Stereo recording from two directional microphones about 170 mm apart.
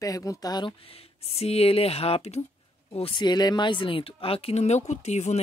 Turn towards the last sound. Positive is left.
turn(degrees=40)  # may be behind; listen again after turning